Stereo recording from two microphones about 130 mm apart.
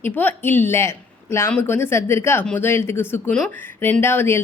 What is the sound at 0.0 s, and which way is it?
Speech, 15° left (ahead or behind).